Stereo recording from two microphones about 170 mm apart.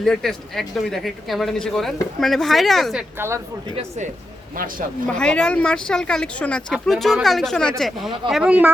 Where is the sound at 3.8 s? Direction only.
45° right (ahead or behind).